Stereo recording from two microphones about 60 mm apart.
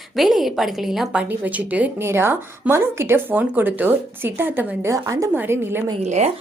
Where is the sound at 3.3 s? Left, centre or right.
Right.